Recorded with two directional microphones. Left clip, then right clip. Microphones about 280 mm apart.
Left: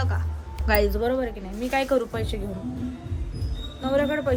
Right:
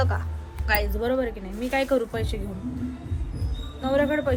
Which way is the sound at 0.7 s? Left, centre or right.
Left.